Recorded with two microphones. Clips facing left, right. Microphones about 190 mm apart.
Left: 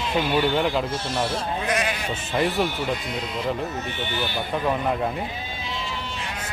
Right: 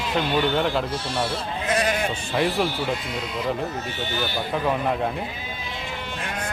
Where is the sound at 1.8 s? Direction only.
50° right (ahead or behind).